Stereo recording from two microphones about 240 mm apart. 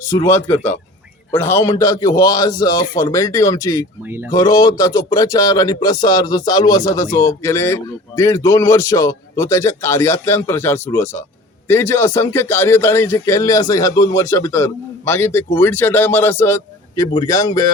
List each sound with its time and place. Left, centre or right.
0.0 s a man's voice: centre